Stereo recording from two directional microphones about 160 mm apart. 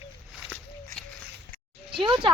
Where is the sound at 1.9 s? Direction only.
30° right (ahead or behind).